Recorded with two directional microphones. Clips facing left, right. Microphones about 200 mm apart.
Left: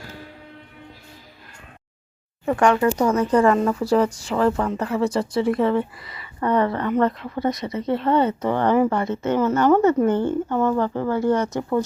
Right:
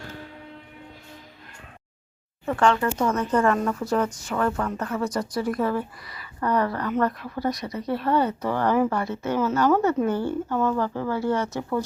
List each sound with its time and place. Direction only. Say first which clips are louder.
2.5 s speech: left 4 dB; 15° left (ahead or behind)
3.8 s speech: left 5 dB; 30° left (ahead or behind)